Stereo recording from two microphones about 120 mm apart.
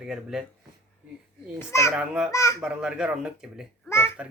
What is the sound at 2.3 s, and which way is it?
Speech, 25° left (ahead or behind).